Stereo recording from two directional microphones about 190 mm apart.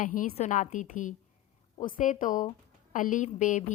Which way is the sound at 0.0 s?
45° left (ahead or behind).